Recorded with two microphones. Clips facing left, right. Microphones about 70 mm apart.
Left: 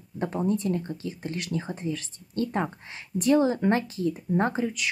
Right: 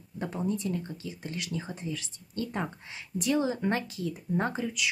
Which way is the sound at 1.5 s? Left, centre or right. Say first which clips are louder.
Left 6 dB; centre.